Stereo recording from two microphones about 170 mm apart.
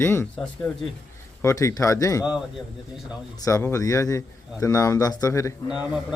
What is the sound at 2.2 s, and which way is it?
Speech, 5° right (ahead or behind).